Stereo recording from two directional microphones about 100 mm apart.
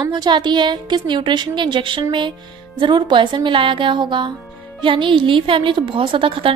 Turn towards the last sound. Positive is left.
turn(degrees=-60)  # may be behind; listen again after turning